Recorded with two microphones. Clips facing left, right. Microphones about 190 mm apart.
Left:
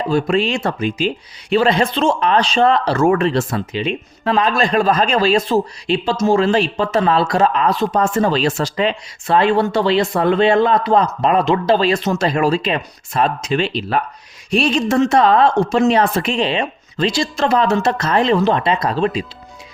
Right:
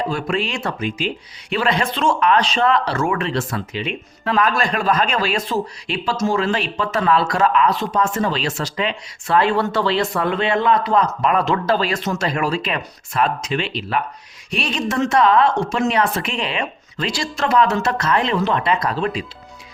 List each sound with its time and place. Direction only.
0.1 s a woman's voice: 30° left (ahead or behind)
3.5 s speech: 25° left (ahead or behind)
10.1 s speech: 30° left (ahead or behind)
11.3 s a woman's voice: 20° left (ahead or behind)